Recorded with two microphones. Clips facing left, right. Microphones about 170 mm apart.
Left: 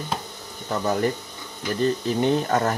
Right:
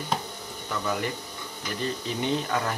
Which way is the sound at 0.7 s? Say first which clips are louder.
Left 7 dB; 40° left (ahead or behind).